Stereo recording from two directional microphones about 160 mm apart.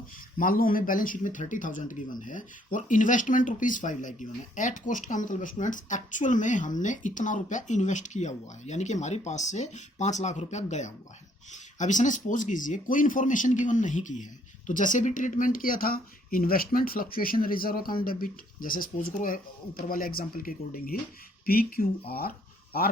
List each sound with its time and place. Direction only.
0.3 s speech: 60° left (ahead or behind)